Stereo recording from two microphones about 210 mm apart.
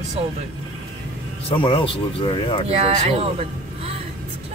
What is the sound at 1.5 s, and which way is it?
Speech, 25° left (ahead or behind).